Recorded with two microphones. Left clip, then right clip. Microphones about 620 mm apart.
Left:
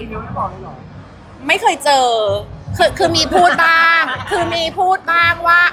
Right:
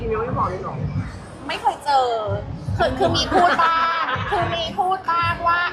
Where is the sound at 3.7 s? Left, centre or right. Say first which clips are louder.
Left 8 dB; left.